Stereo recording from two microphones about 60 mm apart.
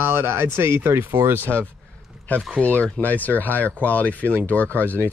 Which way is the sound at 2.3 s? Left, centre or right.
Left.